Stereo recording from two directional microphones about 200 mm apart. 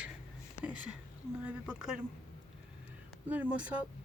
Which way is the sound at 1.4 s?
5° right (ahead or behind).